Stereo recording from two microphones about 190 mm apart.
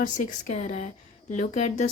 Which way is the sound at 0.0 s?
40° left (ahead or behind).